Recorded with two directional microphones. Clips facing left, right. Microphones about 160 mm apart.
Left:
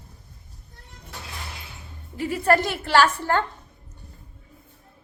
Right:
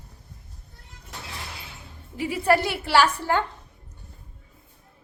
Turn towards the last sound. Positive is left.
turn(degrees=-10)  # may be behind; listen again after turning